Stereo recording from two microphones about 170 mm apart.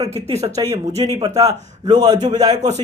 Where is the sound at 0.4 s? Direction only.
20° right (ahead or behind).